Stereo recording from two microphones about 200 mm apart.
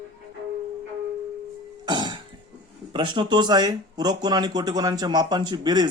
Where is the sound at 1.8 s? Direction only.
20° right (ahead or behind).